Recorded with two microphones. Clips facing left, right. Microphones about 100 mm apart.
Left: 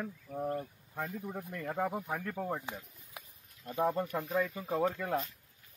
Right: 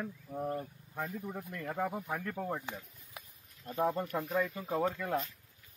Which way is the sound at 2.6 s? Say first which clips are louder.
Even; 15° left (ahead or behind).